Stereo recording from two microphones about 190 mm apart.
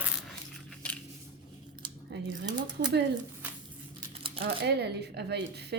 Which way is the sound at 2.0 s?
65° right (ahead or behind).